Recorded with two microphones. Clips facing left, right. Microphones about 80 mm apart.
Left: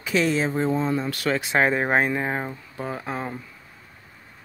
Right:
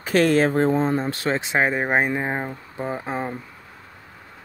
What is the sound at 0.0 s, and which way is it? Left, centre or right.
Speech, right.